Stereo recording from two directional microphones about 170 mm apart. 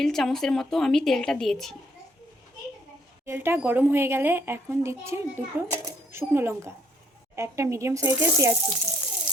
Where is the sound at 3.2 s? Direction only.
15° right (ahead or behind).